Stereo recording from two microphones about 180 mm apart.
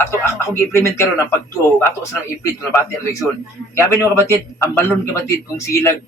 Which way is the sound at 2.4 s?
15° left (ahead or behind).